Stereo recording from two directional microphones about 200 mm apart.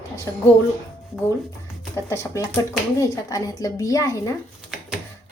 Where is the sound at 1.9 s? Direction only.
15° left (ahead or behind).